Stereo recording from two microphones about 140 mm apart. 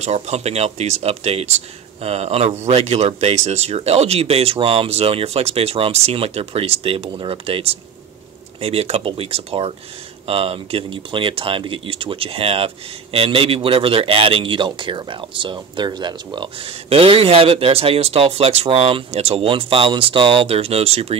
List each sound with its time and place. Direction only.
0.0 s speech: 50° right (ahead or behind)